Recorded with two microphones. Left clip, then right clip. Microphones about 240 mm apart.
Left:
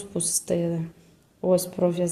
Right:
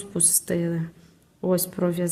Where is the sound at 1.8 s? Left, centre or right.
Right.